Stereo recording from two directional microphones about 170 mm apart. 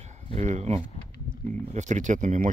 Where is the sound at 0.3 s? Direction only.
45° right (ahead or behind).